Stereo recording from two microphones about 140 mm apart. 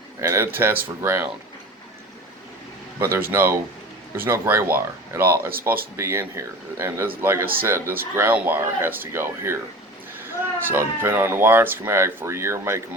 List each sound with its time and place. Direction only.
0.2 s speech: 20° right (ahead or behind)
3.0 s speech: 15° right (ahead or behind)